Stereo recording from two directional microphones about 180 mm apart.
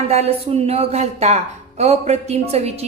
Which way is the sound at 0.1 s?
35° right (ahead or behind).